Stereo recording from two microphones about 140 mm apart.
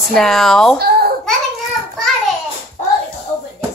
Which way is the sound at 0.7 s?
90° right.